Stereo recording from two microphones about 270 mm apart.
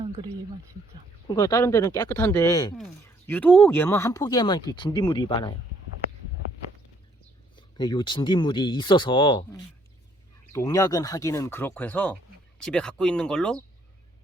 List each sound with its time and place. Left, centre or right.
1.3 s speech: centre
7.5 s speech: centre